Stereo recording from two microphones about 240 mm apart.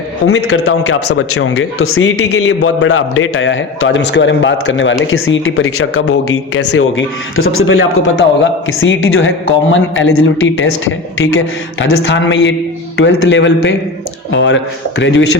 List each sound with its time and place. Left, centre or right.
0.3 s a man's voice: left